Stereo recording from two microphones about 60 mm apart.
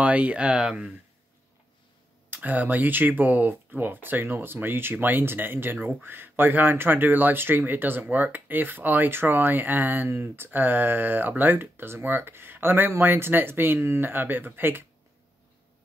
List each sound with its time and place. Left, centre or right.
0.0 s speech: right
2.3 s speech: right